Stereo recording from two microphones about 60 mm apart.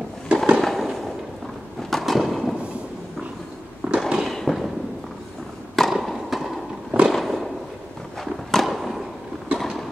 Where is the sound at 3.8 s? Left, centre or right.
Centre.